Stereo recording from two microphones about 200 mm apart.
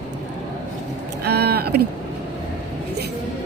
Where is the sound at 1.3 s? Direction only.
50° right (ahead or behind).